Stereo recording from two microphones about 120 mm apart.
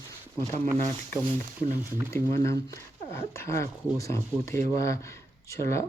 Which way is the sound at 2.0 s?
25° left (ahead or behind).